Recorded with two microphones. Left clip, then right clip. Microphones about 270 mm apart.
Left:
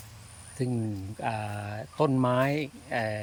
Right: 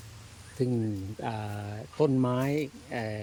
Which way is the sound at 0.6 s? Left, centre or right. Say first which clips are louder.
Right 2 dB; centre.